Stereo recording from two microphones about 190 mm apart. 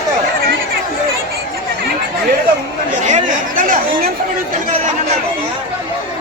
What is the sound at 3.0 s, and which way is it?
Chatter, 40° right (ahead or behind).